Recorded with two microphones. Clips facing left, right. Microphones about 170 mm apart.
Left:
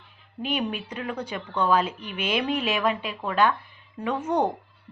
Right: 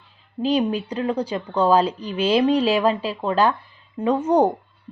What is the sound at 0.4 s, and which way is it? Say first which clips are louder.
Speech: right 8 dB; 35° right (ahead or behind).